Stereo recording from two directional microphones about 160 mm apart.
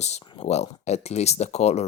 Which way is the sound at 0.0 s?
45° left (ahead or behind).